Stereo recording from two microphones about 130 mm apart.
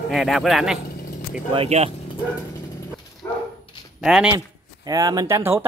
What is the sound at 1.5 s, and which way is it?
Speech, 50° right (ahead or behind).